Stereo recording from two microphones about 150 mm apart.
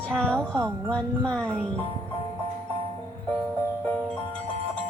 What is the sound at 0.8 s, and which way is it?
Speech, 5° left (ahead or behind).